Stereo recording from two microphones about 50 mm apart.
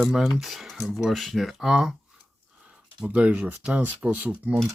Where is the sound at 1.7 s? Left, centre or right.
Centre.